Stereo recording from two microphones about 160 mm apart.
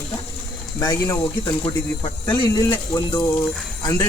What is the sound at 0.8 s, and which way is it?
Speech, 25° left (ahead or behind).